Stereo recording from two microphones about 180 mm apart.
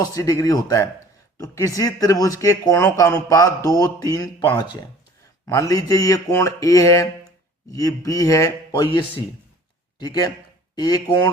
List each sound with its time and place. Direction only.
0.0 s speech: 20° left (ahead or behind)
10.0 s speech: 20° left (ahead or behind)